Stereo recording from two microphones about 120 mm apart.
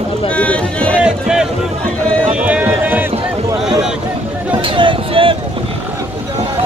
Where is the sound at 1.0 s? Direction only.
5° right (ahead or behind).